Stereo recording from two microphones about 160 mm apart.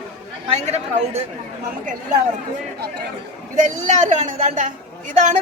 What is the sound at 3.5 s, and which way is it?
A woman's voice, 50° right (ahead or behind).